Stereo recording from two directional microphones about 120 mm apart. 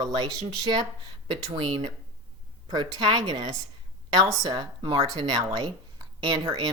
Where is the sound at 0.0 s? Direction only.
35° right (ahead or behind).